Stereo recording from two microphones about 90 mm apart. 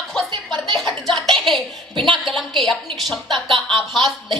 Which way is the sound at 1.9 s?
60° right (ahead or behind).